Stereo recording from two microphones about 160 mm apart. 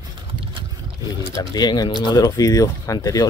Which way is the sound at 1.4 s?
25° left (ahead or behind).